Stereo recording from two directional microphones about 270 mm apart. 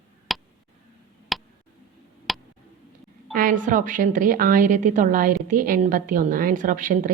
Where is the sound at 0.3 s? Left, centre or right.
Centre.